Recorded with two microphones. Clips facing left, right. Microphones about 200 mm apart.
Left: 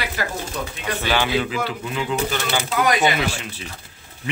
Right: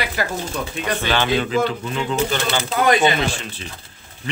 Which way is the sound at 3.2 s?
10° left (ahead or behind).